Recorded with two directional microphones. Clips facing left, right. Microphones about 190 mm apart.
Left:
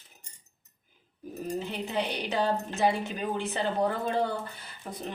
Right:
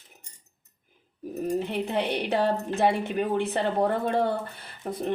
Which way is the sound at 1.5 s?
60° right (ahead or behind).